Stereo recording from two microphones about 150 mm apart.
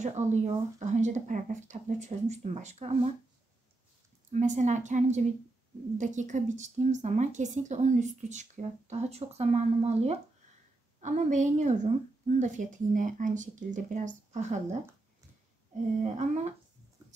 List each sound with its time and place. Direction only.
0.0 s speech: 50° right (ahead or behind)
4.3 s a woman's voice: 55° right (ahead or behind)
16.0 s speech: 50° right (ahead or behind)